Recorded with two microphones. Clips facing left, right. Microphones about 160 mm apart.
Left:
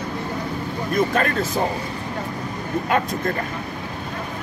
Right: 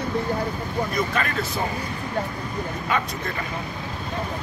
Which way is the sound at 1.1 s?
45° left (ahead or behind).